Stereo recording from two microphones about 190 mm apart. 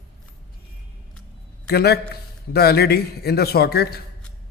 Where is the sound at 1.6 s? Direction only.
55° left (ahead or behind).